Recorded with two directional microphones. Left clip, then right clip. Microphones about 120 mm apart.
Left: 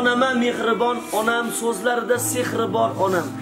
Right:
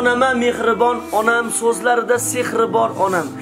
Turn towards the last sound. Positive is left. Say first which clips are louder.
# right 3 dB
turn(degrees=-30)  # may be behind; listen again after turning